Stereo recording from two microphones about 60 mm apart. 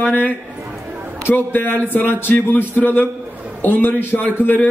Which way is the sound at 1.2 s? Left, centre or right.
Left.